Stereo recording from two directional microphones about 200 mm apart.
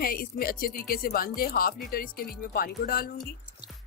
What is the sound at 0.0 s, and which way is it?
A woman's voice, 45° left (ahead or behind).